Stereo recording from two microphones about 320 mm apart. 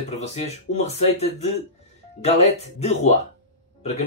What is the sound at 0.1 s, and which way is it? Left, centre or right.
Speech, centre.